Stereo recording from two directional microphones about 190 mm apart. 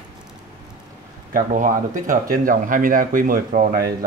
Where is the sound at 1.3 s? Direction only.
45° right (ahead or behind).